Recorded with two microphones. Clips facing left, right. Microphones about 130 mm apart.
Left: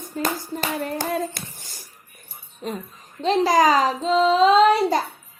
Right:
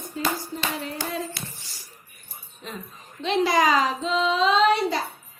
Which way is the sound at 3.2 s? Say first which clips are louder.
Left 4 dB; 40° left (ahead or behind).